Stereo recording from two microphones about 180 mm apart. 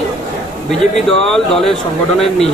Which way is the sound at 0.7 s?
5° left (ahead or behind).